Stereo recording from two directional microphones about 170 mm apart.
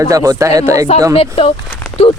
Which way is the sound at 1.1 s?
35° left (ahead or behind).